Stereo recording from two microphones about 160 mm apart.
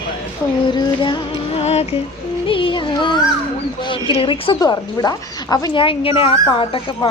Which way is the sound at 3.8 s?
30° left (ahead or behind).